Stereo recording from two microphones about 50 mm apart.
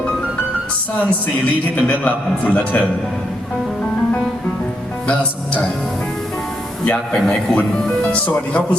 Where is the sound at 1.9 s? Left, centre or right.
Left.